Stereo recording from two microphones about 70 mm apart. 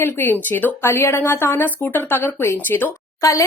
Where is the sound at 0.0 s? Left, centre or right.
Left.